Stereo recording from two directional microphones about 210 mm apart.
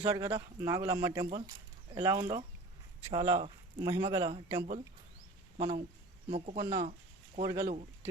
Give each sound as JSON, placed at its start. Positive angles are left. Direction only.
{"t": 0.0, "sound": "speech", "side_deg": -20}
{"t": 7.4, "sound": "speech", "side_deg": -15}